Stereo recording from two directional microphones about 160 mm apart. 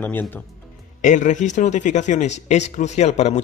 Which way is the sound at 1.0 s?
50° left (ahead or behind).